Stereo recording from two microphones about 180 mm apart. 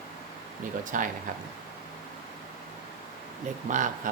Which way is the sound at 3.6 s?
45° right (ahead or behind).